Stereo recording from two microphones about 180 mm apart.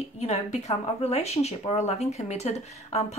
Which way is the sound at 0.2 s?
35° left (ahead or behind).